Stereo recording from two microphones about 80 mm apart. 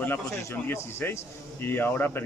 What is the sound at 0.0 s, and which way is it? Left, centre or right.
A man's voice, left.